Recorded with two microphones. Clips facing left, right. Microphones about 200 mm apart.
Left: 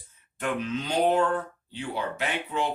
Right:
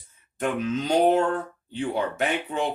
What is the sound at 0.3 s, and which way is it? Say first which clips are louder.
Speech: right 3 dB; 45° right (ahead or behind).